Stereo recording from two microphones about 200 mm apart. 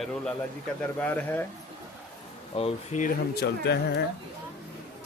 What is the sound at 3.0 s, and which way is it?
Speech, 50° left (ahead or behind).